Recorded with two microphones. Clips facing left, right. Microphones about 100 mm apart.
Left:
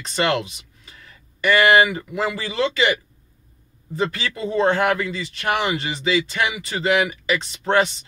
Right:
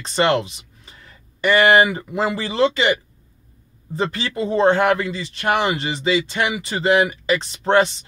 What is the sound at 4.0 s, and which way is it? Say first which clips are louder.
Speech: right 1 dB; 30° right (ahead or behind).